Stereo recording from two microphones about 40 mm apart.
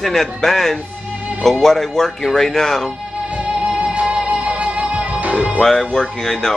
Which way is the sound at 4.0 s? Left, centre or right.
Right.